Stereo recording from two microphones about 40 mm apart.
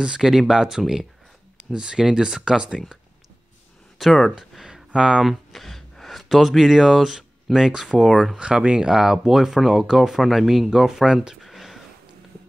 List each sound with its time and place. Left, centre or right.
0.2 s speech: centre
4.0 s speech: centre
4.9 s speech: right
5.2 s speech: centre
8.4 s speech: right
8.8 s speech: centre
11.4 s a sound: centre